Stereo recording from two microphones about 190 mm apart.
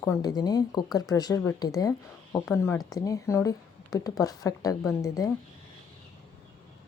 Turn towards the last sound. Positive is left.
turn(degrees=15)  # may be behind; listen again after turning